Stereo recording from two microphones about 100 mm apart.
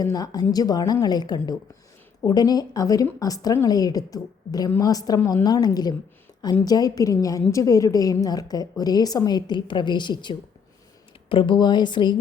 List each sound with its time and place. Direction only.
0.0 s a woman's voice: 40° left (ahead or behind)
11.3 s a woman's voice: 60° left (ahead or behind)